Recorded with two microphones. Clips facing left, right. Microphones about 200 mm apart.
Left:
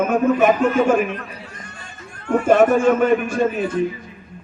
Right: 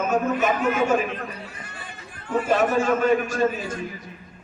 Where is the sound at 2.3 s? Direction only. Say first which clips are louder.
Left 7 dB; 55° left (ahead or behind).